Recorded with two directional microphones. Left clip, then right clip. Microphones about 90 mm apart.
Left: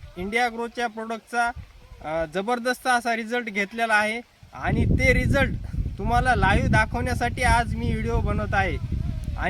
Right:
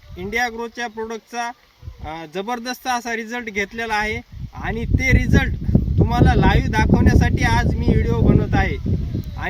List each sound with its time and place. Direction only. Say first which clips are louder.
0.2 s speech: right 2 dB; 25° left (ahead or behind)